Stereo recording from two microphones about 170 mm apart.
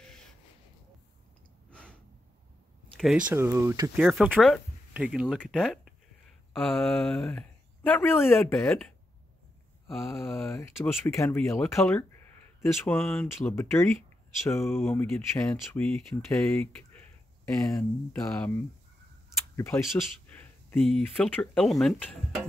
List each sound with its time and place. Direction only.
1.7 s a sound: 5° left (ahead or behind)
2.9 s speech: centre (ahead or behind); by 3.9 s 20° right (ahead or behind)
3.9 s speech: 5° right (ahead or behind)
10.0 s speech: 15° left (ahead or behind)
12.8 s speech: 10° left (ahead or behind)
17.5 s speech: 15° left (ahead or behind)